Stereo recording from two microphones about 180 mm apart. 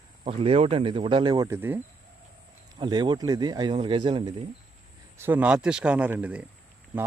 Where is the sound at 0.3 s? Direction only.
30° right (ahead or behind); by 1.8 s 10° right (ahead or behind).